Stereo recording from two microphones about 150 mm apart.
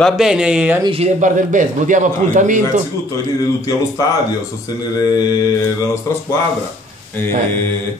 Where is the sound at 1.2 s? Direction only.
60° right (ahead or behind).